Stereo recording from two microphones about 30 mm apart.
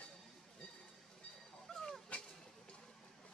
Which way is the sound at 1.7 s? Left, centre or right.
Centre.